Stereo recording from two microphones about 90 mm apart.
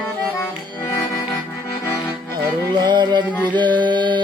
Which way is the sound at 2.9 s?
55° right (ahead or behind).